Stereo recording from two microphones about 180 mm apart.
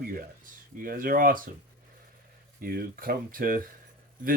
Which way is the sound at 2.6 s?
55° right (ahead or behind).